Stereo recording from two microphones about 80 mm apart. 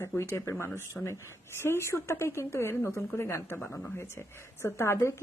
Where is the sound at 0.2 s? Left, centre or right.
Left.